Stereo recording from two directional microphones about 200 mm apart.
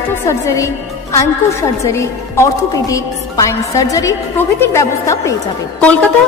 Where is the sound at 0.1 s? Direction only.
15° left (ahead or behind).